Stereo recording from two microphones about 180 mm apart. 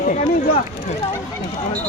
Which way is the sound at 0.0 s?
45° left (ahead or behind).